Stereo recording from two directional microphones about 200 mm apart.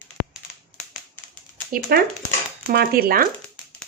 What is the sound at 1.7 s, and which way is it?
A woman's voice, 50° right (ahead or behind).